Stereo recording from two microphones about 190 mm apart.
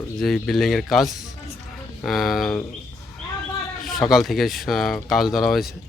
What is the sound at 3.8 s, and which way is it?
Speech, centre (ahead or behind).